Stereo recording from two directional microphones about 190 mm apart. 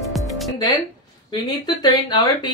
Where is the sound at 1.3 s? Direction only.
20° left (ahead or behind).